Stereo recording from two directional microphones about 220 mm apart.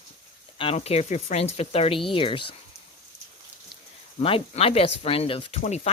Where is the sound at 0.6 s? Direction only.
25° left (ahead or behind).